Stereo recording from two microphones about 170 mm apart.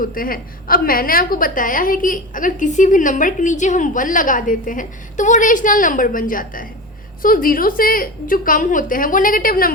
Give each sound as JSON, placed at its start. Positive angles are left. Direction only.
{"t": 0.0, "sound": "a woman's voice", "side_deg": 55}